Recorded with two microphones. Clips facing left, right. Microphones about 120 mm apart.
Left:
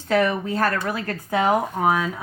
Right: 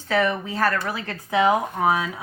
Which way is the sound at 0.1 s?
45° left (ahead or behind).